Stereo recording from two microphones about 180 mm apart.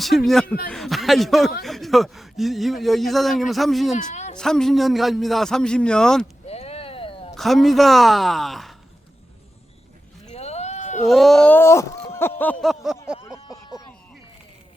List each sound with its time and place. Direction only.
0.0 s speech: centre (ahead or behind)
3.9 s a woman's voice: 40° left (ahead or behind)
4.4 s speech: 5° left (ahead or behind)
6.5 s a sound: 35° left (ahead or behind)
7.3 s speech: centre (ahead or behind)
10.2 s sheep: 35° left (ahead or behind)
11.0 s speech: centre (ahead or behind)
12.6 s speech: centre (ahead or behind)
13.2 s a sound: 15° left (ahead or behind)